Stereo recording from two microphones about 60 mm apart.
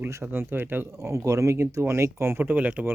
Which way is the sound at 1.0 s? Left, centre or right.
Right.